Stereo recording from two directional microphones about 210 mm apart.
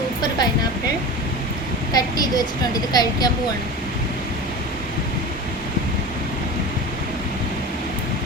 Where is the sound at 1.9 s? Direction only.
20° left (ahead or behind).